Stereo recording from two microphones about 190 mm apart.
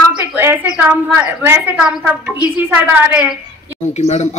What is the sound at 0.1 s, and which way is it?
A woman's voice, 10° right (ahead or behind).